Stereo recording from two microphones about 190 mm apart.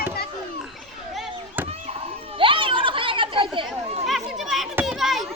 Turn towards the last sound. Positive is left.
turn(degrees=0)  # may be behind; listen again after turning